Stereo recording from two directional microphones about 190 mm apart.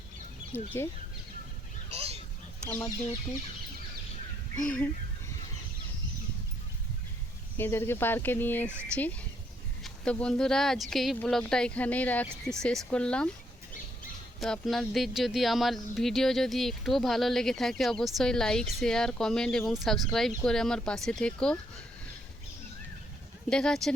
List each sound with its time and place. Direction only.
0.5 s speech: 10° left (ahead or behind)
1.9 s a sound: 30° right (ahead or behind)
2.6 s speech: 15° left (ahead or behind)
7.5 s speech: 10° left (ahead or behind)
14.4 s speech: centre (ahead or behind)
23.5 s speech: 5° left (ahead or behind)